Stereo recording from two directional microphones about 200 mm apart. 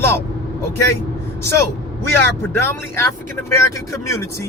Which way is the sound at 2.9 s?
15° left (ahead or behind).